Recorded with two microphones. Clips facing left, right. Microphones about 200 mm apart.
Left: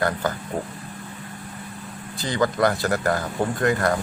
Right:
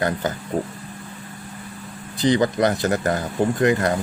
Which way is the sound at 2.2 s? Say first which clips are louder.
Right 3 dB; 20° right (ahead or behind).